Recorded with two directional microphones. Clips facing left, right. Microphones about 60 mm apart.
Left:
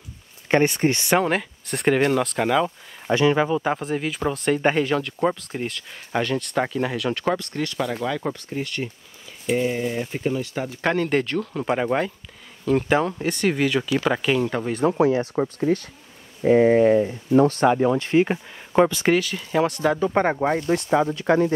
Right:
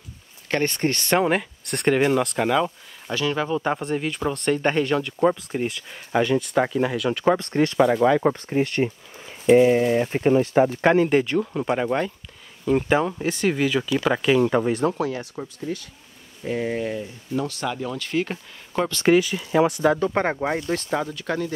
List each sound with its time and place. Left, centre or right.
0.7 s speech: centre
1.2 s speech: centre
3.1 s speech: left
3.3 s speech: centre
7.3 s speech: right
10.8 s speech: centre
11.6 s speech: centre
12.6 s speech: centre
15.0 s speech: left
16.4 s speech: left
18.9 s speech: centre
19.1 s speech: centre
20.0 s speech: centre
20.6 s speech: left